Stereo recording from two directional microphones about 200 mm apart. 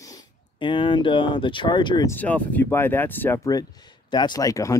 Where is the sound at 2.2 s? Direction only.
10° left (ahead or behind).